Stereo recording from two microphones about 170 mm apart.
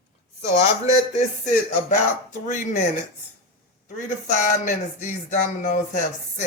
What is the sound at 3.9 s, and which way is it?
Speech, 45° left (ahead or behind).